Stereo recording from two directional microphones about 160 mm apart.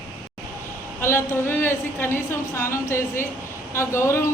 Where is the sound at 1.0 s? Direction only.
15° left (ahead or behind).